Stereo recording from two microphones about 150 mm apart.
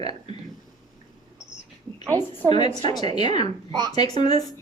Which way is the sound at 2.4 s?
30° left (ahead or behind).